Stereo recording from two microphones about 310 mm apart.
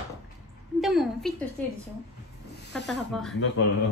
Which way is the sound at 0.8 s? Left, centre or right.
Centre.